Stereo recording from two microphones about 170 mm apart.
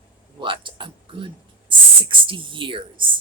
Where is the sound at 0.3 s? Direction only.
30° right (ahead or behind).